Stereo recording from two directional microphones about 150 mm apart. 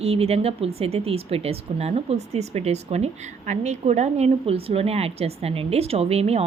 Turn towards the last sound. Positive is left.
turn(degrees=-45)  # may be behind; listen again after turning